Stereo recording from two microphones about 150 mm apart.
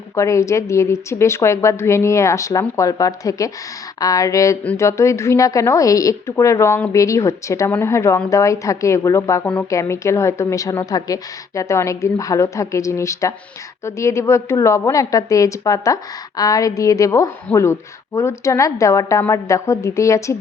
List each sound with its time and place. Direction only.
0.2 s a woman's voice: 20° left (ahead or behind)
4.6 s a woman's voice: 10° left (ahead or behind)